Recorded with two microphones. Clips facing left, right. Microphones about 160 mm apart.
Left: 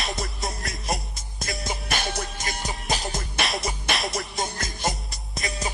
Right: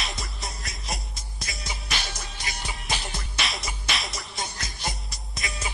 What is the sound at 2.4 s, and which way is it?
Music, 45° left (ahead or behind).